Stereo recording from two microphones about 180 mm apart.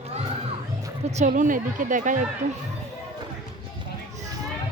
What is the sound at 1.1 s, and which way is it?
A woman's voice, 40° right (ahead or behind).